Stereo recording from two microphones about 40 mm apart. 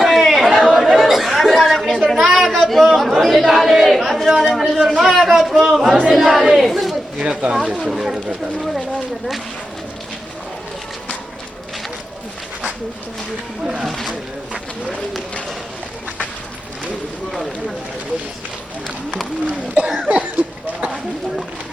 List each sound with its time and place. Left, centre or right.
0.0 s chatter: centre
2.3 s a sound: centre
2.6 s chatter: centre
4.4 s a sound: centre
5.3 s a man's voice: centre
6.1 s speech: centre
6.5 s battle cry: centre
7.2 s speech: right
7.9 s speech: centre
8.5 s speech: centre
13.8 s speech: centre
19.5 s speech: right
20.1 s speech: right